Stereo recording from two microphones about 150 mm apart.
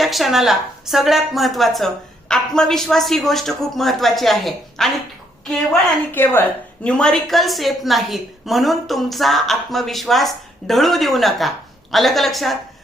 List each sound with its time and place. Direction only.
0.0 s a woman's voice: centre (ahead or behind)
6.1 s a woman's voice: 15° left (ahead or behind)